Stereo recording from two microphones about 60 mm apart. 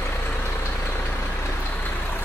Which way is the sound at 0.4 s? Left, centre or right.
Left.